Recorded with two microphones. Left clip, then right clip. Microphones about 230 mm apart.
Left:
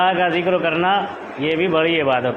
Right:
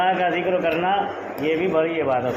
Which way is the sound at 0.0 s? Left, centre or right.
Left.